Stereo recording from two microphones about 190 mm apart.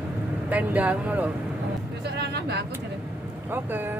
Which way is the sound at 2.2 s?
60° right (ahead or behind).